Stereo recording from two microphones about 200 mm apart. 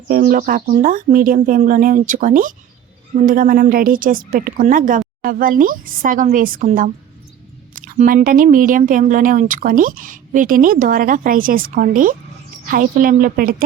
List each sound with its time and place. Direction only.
0.1 s speech: 45° right (ahead or behind)